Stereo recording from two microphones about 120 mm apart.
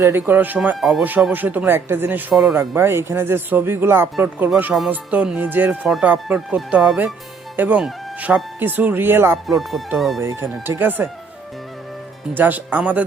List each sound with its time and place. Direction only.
0.0 s speech: 20° right (ahead or behind)
0.8 s speech: centre (ahead or behind)
1.0 s speech: 15° right (ahead or behind)
9.5 s speech: centre (ahead or behind)
10.2 s speech: 25° right (ahead or behind)
12.3 s speech: 15° right (ahead or behind)